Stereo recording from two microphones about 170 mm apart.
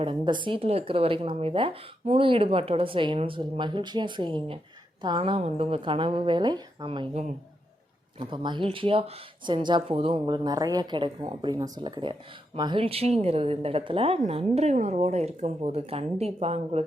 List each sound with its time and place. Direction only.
0.0 s speech: 30° right (ahead or behind)